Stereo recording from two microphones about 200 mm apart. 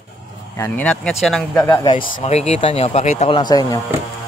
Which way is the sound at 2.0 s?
40° left (ahead or behind).